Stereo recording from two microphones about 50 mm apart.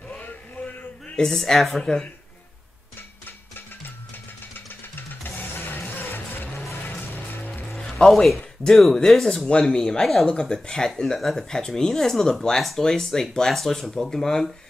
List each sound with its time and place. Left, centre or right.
0.2 s male singing: left
1.1 s speech: centre
5.2 s music: left
7.6 s music: centre
8.6 s speech: centre